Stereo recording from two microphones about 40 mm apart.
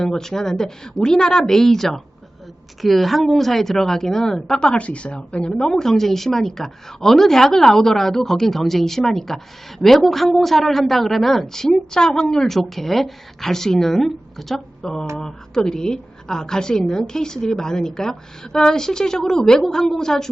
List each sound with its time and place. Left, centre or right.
0.0 s a woman's voice: centre
4.7 s a woman's voice: left
5.5 s a woman's voice: centre